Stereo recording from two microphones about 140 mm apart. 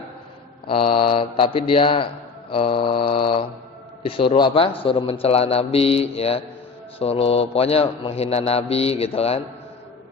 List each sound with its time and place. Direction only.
0.7 s mantra: 40° left (ahead or behind)
4.0 s a man's voice: 40° left (ahead or behind)